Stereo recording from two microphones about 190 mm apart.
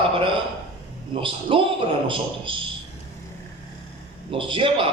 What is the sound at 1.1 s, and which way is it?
A man's voice, 30° right (ahead or behind).